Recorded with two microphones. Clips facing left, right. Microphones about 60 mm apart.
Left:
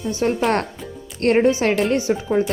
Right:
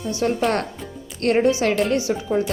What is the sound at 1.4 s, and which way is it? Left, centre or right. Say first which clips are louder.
A woman's voice: even; left.